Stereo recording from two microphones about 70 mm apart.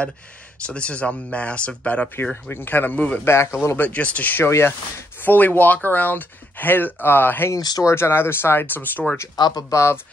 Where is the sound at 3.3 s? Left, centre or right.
Left.